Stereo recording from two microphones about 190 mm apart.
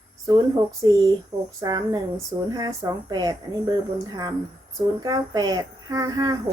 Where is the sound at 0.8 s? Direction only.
25° right (ahead or behind).